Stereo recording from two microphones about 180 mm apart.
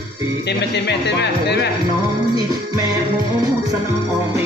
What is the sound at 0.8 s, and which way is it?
Speech, 70° left (ahead or behind).